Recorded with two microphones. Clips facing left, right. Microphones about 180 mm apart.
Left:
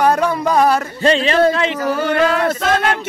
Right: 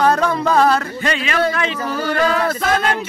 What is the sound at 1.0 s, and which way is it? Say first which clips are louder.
Speech: left 6 dB; 30° left (ahead or behind).